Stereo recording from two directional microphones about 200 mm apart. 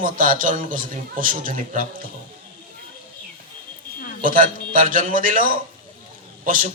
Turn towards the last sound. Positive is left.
turn(degrees=-40)  # may be behind; listen again after turning